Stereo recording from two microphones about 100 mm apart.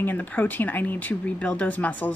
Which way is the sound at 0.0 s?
15° left (ahead or behind).